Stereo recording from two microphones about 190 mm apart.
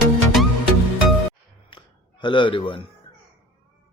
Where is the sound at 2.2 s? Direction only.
25° left (ahead or behind).